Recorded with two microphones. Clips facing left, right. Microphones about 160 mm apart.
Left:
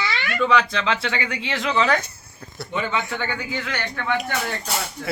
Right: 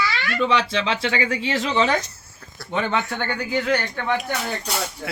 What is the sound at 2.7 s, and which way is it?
Speech, 70° right (ahead or behind).